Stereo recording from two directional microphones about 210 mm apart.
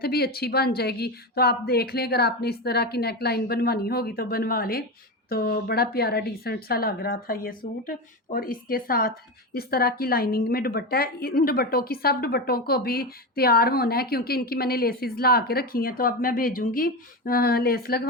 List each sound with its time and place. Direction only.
0.0 s a woman's voice: 45° left (ahead or behind)